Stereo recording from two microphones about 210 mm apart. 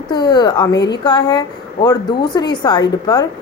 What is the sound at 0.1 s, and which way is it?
Speech, 20° left (ahead or behind).